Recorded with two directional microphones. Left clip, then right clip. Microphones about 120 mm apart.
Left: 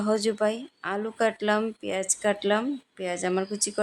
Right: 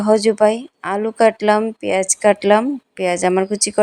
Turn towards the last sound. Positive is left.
turn(degrees=-50)  # may be behind; listen again after turning